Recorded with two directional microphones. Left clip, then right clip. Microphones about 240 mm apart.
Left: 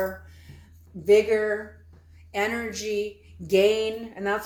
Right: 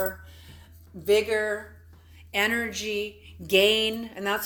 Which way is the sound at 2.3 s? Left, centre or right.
Right.